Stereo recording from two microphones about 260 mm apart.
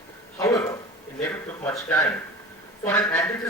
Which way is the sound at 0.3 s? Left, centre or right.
Centre.